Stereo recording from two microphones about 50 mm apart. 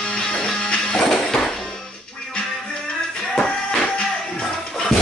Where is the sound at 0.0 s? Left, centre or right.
Centre.